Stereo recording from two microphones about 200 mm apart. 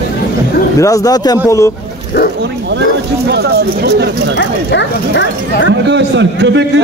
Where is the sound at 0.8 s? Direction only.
15° left (ahead or behind).